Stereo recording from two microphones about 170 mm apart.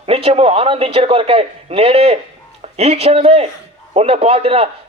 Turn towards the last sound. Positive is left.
turn(degrees=-35)  # may be behind; listen again after turning